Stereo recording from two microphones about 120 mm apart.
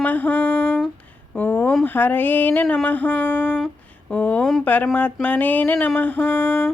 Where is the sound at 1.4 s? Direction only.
15° left (ahead or behind).